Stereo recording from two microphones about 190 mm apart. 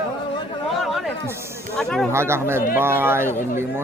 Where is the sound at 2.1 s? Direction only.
15° right (ahead or behind).